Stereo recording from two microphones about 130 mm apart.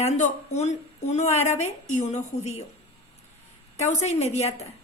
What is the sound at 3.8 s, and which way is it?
Speech, 60° left (ahead or behind).